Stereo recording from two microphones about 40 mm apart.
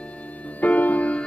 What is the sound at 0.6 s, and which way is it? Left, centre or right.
Music, left.